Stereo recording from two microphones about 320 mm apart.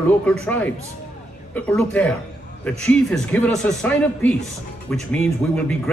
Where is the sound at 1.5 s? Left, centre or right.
Centre.